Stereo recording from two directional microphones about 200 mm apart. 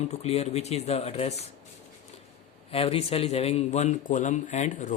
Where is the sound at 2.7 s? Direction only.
30° left (ahead or behind).